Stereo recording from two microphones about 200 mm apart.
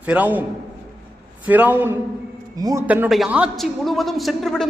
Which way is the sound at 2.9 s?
5° right (ahead or behind).